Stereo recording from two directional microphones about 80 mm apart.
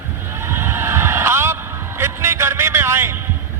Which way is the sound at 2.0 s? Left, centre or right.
Right.